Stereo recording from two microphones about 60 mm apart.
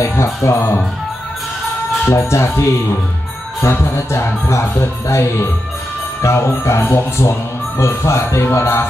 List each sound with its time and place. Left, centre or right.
0.0 s speech: left
2.0 s speech: left
6.8 s speech: left